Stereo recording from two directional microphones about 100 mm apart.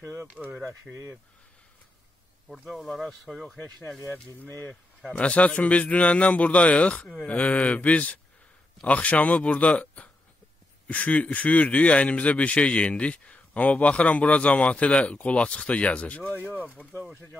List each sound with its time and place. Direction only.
0.3 s speech: 15° right (ahead or behind)
0.9 s speech: centre (ahead or behind)
2.4 s speech: centre (ahead or behind)
3.5 s a man's voice: 20° left (ahead or behind)